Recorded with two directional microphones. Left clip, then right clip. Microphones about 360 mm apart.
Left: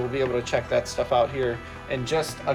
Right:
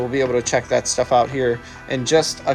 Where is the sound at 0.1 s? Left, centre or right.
Centre.